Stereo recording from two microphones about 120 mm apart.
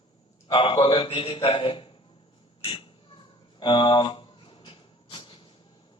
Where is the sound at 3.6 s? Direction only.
40° left (ahead or behind).